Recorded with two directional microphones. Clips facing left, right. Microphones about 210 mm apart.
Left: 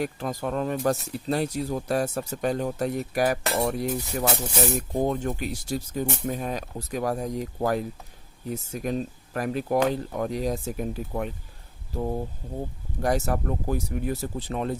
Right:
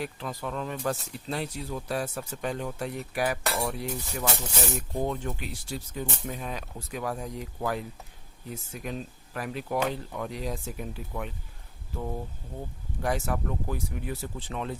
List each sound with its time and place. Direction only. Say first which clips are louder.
0.0 s speech: left 6 dB; 45° left (ahead or behind)
4.9 s speech: left 5 dB; 50° left (ahead or behind)